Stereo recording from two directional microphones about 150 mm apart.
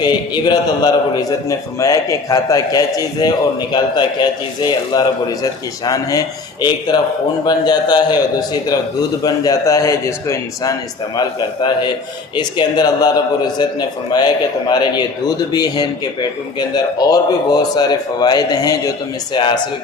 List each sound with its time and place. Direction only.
0.0 s a man's voice: 30° left (ahead or behind)